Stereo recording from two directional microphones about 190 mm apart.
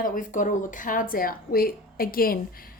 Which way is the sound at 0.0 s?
45° left (ahead or behind).